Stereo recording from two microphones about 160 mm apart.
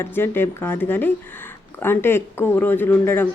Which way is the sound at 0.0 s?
15° left (ahead or behind).